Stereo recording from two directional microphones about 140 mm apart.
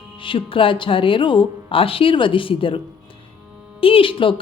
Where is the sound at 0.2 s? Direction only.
40° left (ahead or behind).